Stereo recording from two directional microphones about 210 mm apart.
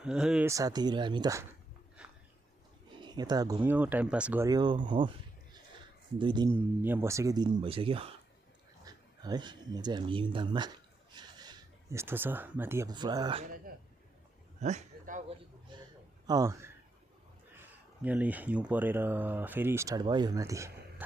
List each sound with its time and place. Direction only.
0.0 s speech: 5° right (ahead or behind)
0.5 s speech: 20° right (ahead or behind)
2.0 s a sound: 5° right (ahead or behind)
3.0 s speech: 20° right (ahead or behind)
6.1 s speech: 20° right (ahead or behind)
6.5 s speech: 10° right (ahead or behind)
14.6 s a man's voice: 35° right (ahead or behind)
15.7 s a sound: 20° right (ahead or behind)
16.2 s a man's voice: 15° right (ahead or behind)